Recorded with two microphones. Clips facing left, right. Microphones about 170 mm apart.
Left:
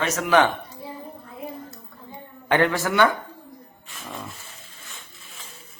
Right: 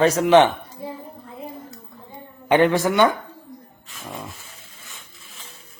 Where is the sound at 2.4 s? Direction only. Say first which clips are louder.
Right 4 dB; 20° right (ahead or behind).